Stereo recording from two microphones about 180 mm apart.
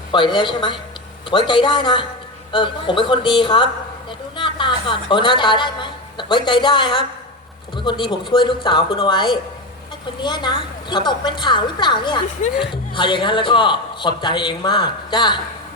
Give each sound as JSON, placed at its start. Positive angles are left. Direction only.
{"t": 0.1, "sound": "a man's voice", "side_deg": 25}
{"t": 12.4, "sound": "speech", "side_deg": 40}
{"t": 12.7, "sound": "a man's voice", "side_deg": 25}